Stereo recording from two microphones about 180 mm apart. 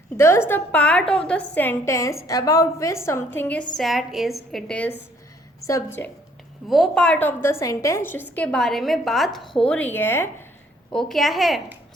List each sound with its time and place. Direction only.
0.2 s a woman's voice: 15° left (ahead or behind)
6.7 s a woman's voice: centre (ahead or behind)
10.9 s a woman's voice: centre (ahead or behind)